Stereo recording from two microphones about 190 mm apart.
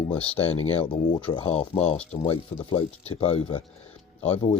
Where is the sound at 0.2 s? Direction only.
30° left (ahead or behind).